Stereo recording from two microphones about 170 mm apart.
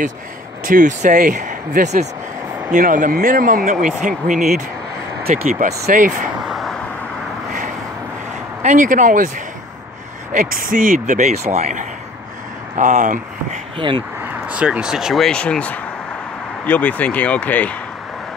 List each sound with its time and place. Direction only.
0.7 s speech: 50° right (ahead or behind)
6.4 s vehicle: centre (ahead or behind)
8.6 s speech: 50° right (ahead or behind)
10.3 s speech: 55° right (ahead or behind)
13.7 s speech: 30° right (ahead or behind)
14.2 s speech: 5° right (ahead or behind); by 17.7 s 10° left (ahead or behind)